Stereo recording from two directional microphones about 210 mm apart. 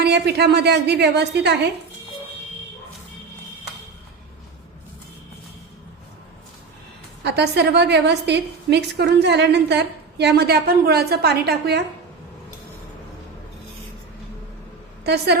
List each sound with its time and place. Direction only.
0.0 s a woman's voice: 50° right (ahead or behind)
7.2 s a woman's voice: 50° right (ahead or behind)
15.0 s a woman's voice: 50° right (ahead or behind)